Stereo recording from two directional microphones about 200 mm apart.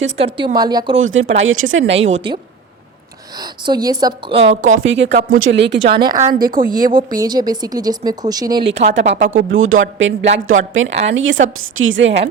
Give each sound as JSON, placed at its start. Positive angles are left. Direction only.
{"t": 0.2, "sound": "speech", "side_deg": -25}
{"t": 0.9, "sound": "a woman's voice", "side_deg": -80}
{"t": 2.0, "sound": "a woman's voice", "side_deg": -30}
{"t": 4.8, "sound": "a woman's voice", "side_deg": -70}
{"t": 5.9, "sound": "speech", "side_deg": -20}
{"t": 6.4, "sound": "a woman's voice", "side_deg": -45}
{"t": 7.1, "sound": "speech", "side_deg": -20}
{"t": 8.6, "sound": "a woman's voice", "side_deg": -60}